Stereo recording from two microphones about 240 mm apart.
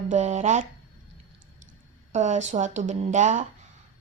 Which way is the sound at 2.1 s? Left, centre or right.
Right.